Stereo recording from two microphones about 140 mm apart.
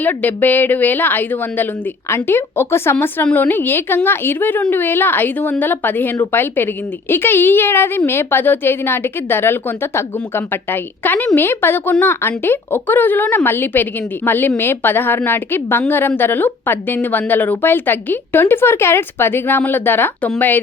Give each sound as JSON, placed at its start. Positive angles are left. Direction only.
{"t": 0.0, "sound": "a woman's voice", "side_deg": 10}